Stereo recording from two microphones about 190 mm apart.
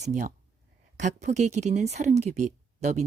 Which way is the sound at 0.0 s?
40° right (ahead or behind).